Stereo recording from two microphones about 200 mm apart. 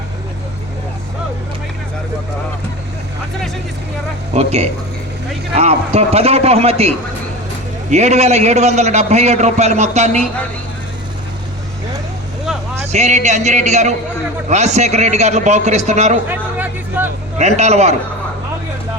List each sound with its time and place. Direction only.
4.4 s a man's voice: 30° right (ahead or behind)
12.5 s vehicle: centre (ahead or behind)
12.9 s a man's voice: 35° right (ahead or behind)
16.3 s a sound: 10° right (ahead or behind)
17.3 s a man's voice: 35° right (ahead or behind)